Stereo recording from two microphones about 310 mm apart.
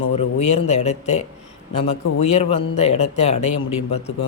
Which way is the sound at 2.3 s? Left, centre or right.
Centre.